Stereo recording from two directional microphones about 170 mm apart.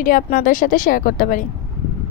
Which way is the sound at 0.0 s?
55° left (ahead or behind).